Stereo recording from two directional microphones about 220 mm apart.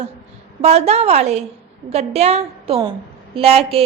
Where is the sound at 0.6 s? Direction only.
30° right (ahead or behind).